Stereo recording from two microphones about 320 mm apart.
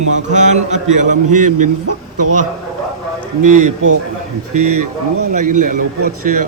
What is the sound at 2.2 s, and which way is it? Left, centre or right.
Speech, right.